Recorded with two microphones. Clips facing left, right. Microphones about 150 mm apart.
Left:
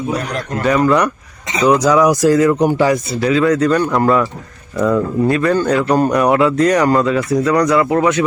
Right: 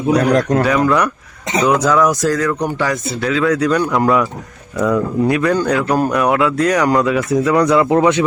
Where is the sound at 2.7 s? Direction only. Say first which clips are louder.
Left 5 dB; 10° left (ahead or behind).